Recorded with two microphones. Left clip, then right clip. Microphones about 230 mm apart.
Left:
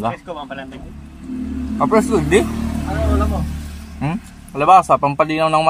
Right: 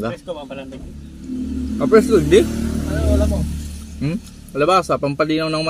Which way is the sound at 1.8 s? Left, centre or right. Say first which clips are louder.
Right 2 dB; left.